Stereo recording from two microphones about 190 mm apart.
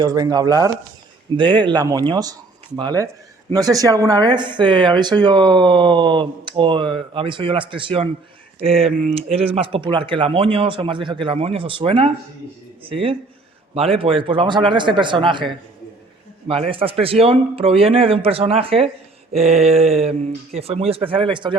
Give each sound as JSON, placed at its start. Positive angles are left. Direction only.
{"t": 0.0, "sound": "speech", "side_deg": -20}
{"t": 16.5, "sound": "speech", "side_deg": -30}